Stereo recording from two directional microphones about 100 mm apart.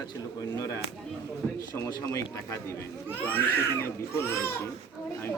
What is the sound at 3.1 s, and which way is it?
Speech, 15° left (ahead or behind).